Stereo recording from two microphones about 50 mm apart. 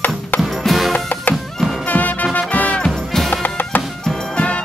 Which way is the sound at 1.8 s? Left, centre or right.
Left.